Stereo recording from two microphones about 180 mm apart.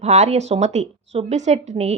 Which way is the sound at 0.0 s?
35° right (ahead or behind).